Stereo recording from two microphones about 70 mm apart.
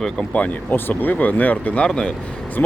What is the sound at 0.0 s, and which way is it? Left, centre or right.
Speech, centre.